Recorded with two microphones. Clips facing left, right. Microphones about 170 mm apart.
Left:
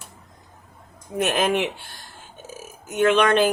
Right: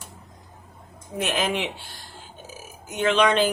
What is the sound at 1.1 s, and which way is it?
Speech, 50° left (ahead or behind).